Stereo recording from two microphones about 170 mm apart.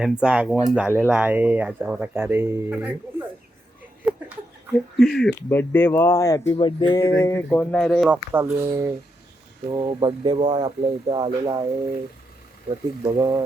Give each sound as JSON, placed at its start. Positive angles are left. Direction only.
{"t": 0.0, "sound": "speech", "side_deg": -5}
{"t": 4.9, "sound": "speech", "side_deg": 0}
{"t": 8.0, "sound": "speech", "side_deg": -10}
{"t": 9.7, "sound": "speech", "side_deg": -25}
{"t": 13.1, "sound": "speech", "side_deg": -20}